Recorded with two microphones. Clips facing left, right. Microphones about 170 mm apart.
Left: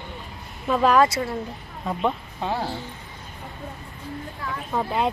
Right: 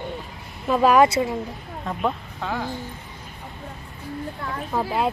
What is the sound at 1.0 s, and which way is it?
Speech, 15° right (ahead or behind).